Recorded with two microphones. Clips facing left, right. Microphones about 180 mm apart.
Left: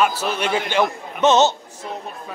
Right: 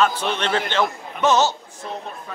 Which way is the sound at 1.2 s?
20° left (ahead or behind).